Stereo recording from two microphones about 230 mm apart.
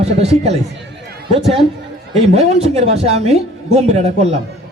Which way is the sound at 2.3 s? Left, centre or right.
Right.